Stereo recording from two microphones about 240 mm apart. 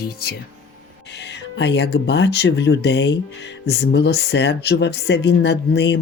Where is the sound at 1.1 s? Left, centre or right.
Left.